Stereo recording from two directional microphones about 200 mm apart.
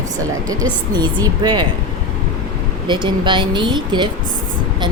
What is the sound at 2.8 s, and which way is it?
Speech, 25° right (ahead or behind).